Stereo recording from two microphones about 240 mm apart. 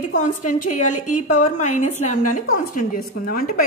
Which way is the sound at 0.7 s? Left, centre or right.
Left.